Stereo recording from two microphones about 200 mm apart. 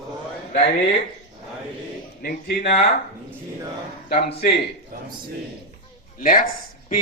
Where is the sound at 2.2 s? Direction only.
50° left (ahead or behind).